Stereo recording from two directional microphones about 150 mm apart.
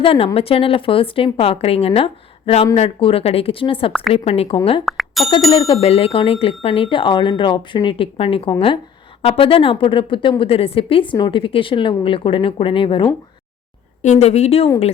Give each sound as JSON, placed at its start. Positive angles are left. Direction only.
{"t": 0.0, "sound": "a woman's voice", "side_deg": 40}
{"t": 4.9, "sound": "bicycle bell", "side_deg": 0}
{"t": 5.5, "sound": "a woman's voice", "side_deg": 40}
{"t": 14.0, "sound": "speech", "side_deg": 50}